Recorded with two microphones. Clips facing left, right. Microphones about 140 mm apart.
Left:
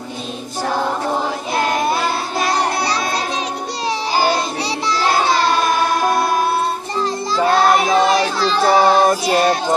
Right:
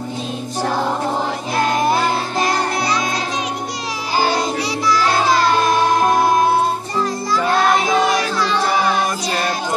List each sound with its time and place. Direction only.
7.9 s music: 30° left (ahead or behind)